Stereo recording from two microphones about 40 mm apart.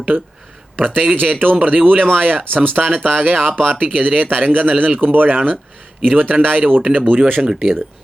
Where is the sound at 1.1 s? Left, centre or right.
Right.